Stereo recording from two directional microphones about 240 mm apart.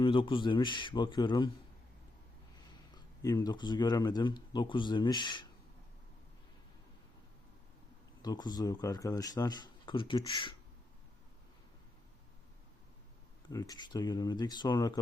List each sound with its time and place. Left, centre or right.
0.0 s speech: left
3.2 s speech: centre
8.2 s speech: centre
13.5 s speech: centre